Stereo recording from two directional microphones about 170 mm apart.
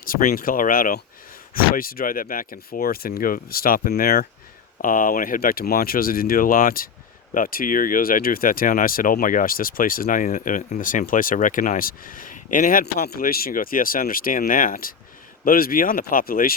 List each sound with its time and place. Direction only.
0.0 s speech: 50° left (ahead or behind)